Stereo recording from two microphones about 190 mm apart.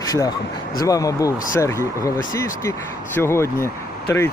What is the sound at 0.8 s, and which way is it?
Speech, 20° left (ahead or behind).